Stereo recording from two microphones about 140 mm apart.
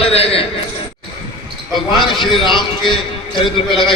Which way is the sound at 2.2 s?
35° left (ahead or behind).